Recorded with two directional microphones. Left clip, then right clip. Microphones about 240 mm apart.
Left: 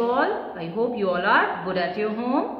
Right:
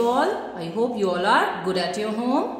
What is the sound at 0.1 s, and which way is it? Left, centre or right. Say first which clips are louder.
A woman's voice: right 1 dB; right.